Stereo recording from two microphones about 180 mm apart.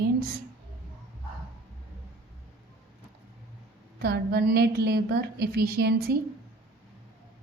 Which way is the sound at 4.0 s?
65° right (ahead or behind).